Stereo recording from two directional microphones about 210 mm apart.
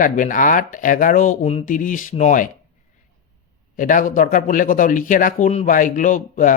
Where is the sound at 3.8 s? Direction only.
40° left (ahead or behind).